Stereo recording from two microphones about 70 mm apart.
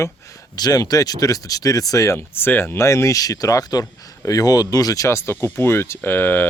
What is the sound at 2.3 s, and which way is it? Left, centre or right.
Speech, left.